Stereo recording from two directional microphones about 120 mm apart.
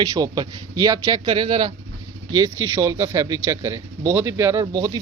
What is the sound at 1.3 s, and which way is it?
Speech, 45° right (ahead or behind).